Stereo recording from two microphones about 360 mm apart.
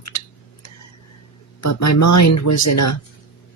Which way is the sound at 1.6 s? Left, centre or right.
Left.